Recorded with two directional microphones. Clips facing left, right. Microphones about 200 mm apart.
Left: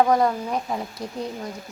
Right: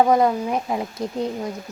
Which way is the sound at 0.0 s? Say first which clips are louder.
Right 2 dB; 20° right (ahead or behind).